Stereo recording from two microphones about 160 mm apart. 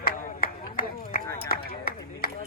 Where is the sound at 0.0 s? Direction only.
65° left (ahead or behind).